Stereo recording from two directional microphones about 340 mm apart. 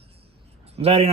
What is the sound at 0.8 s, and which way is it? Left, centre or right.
Speech, centre.